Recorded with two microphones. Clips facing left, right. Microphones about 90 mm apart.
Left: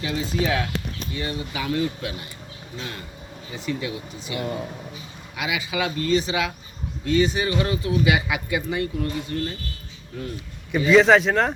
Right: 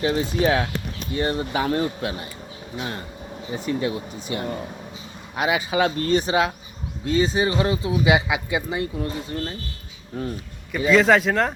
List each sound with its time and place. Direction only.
0.0 s speech: 35° right (ahead or behind)
3.5 s speech: 35° right (ahead or behind)
10.1 s speech: 35° right (ahead or behind)
10.8 s speech: centre (ahead or behind)